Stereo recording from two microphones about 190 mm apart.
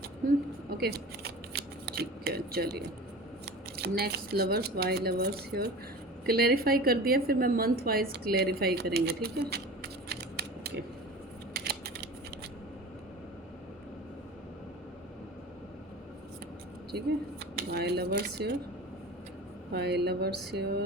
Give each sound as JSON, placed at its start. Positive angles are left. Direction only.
{"t": 0.8, "sound": "scissors", "side_deg": -55}
{"t": 3.4, "sound": "a woman's voice", "side_deg": -60}
{"t": 11.5, "sound": "scissors", "side_deg": -55}
{"t": 17.4, "sound": "speech", "side_deg": -60}
{"t": 19.7, "sound": "speech", "side_deg": -60}